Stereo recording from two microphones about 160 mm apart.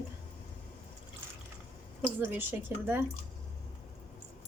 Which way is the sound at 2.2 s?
10° right (ahead or behind).